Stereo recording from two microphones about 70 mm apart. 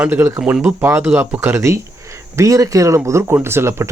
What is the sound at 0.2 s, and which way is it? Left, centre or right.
Speech, right.